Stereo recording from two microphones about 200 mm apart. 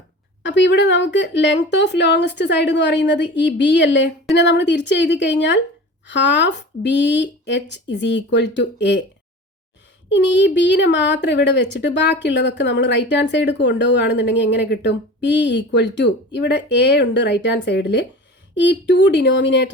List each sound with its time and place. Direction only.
0.4 s speech: 60° left (ahead or behind)
10.1 s speech: 60° left (ahead or behind)